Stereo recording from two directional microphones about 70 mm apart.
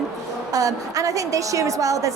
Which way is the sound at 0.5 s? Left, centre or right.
Right.